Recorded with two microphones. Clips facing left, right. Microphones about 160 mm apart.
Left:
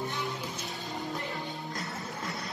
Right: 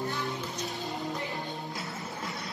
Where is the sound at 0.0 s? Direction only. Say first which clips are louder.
Right 1 dB; 20° left (ahead or behind).